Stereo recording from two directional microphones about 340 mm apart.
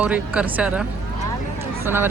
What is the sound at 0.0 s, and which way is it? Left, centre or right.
Speech, centre.